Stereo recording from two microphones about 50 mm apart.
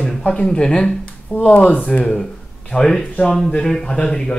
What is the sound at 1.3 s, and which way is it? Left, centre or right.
Speech, left.